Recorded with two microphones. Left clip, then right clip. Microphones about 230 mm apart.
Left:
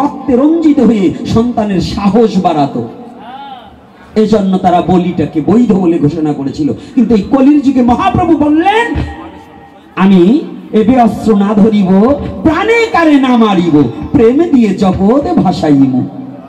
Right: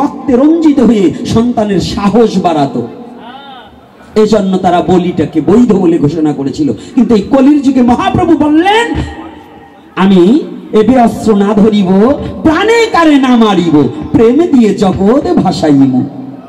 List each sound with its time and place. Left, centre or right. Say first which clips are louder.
0.3 s a man's voice: right 2 dB; right
4.1 s a man's voice: right 2 dB; right
10.7 s speech: right 2 dB; right